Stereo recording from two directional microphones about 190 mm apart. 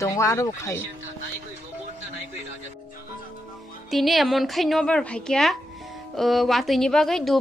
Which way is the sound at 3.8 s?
Centre (ahead or behind).